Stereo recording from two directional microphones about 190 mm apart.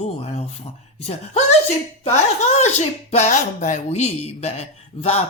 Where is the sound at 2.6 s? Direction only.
35° left (ahead or behind).